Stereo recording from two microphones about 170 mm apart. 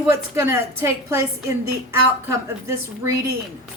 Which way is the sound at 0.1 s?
15° right (ahead or behind).